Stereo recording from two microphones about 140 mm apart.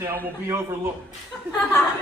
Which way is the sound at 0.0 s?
20° right (ahead or behind).